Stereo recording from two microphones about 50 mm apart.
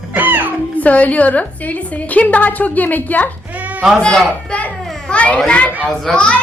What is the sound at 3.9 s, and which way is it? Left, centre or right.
Speech, centre.